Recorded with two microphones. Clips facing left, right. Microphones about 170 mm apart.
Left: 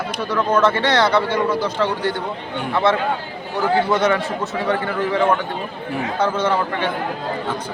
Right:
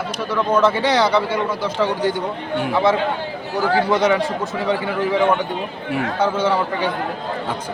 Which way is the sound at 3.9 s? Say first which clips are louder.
Right 3 dB; 15° right (ahead or behind).